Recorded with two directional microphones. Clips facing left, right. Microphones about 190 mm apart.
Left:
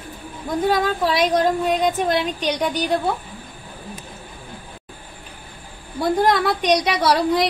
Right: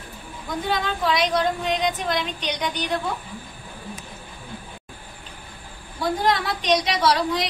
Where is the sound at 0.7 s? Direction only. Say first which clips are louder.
Left 1 dB; 45° left (ahead or behind).